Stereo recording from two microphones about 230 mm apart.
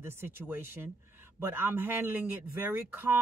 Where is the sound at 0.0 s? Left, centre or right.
Centre.